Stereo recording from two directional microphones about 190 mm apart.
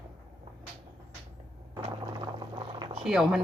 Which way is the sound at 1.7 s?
20° right (ahead or behind).